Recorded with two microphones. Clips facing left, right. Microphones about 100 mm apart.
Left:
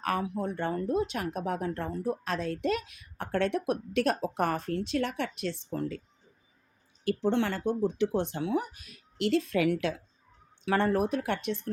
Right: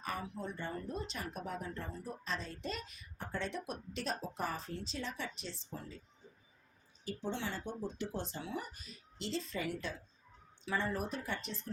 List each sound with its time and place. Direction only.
0.0 s speech: 65° left (ahead or behind)
7.0 s speech: 75° left (ahead or behind)